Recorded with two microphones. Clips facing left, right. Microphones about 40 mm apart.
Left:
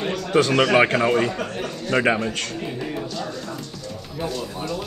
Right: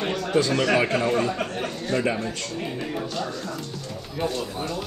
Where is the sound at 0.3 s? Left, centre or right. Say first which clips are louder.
Left 4 dB; left.